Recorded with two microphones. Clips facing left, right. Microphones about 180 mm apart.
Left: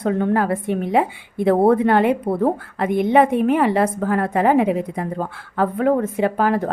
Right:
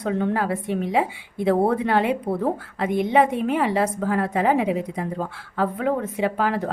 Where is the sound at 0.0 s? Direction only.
50° left (ahead or behind).